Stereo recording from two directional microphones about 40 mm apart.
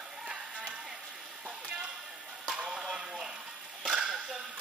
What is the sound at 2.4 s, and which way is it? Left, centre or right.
Music, centre.